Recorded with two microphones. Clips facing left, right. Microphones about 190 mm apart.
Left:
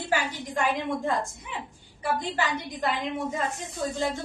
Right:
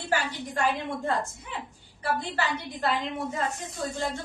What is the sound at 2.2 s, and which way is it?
Speech, 15° left (ahead or behind).